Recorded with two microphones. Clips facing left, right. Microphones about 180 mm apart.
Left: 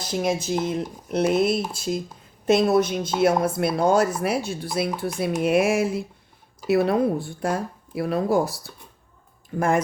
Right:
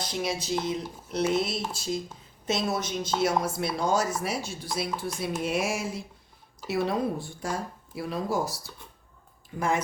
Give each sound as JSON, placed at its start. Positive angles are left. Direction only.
{"t": 0.2, "sound": "speech", "side_deg": 50}